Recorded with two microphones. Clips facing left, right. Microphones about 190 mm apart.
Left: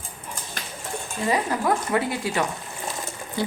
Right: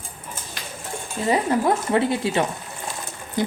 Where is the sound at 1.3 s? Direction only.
25° right (ahead or behind).